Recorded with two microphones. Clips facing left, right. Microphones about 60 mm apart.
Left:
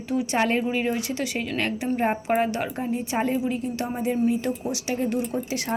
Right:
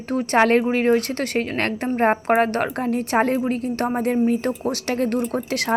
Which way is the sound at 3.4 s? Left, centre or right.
Right.